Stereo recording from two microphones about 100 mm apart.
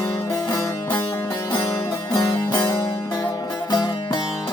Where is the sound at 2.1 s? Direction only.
35° left (ahead or behind).